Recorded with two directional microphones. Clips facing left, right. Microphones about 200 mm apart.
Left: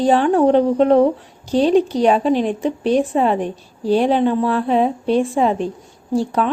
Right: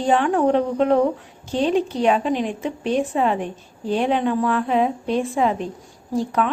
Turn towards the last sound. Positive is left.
turn(degrees=30)  # may be behind; listen again after turning